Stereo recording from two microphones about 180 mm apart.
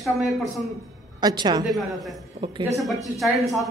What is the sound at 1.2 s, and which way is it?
Speech, 25° right (ahead or behind).